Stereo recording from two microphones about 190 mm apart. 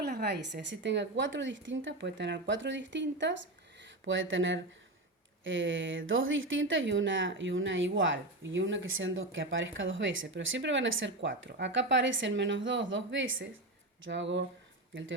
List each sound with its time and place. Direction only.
0.0 s a woman's voice: 60° right (ahead or behind)
4.0 s a woman's voice: 85° right